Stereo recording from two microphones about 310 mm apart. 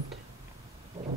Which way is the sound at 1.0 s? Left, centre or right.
Centre.